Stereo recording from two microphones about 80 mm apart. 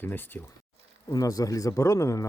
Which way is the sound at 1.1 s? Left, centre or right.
Left.